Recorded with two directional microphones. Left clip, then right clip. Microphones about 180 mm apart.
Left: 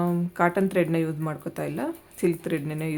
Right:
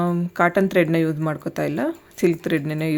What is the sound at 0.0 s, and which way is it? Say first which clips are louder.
Speech: right 4 dB; 25° right (ahead or behind).